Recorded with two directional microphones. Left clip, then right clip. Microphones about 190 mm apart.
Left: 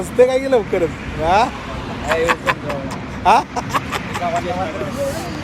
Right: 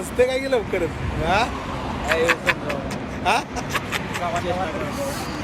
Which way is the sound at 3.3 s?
Centre (ahead or behind).